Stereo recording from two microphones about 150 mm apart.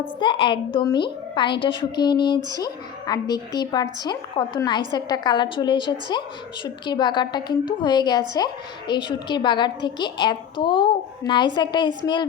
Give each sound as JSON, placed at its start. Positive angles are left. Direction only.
{"t": 0.2, "sound": "a woman's voice", "side_deg": 35}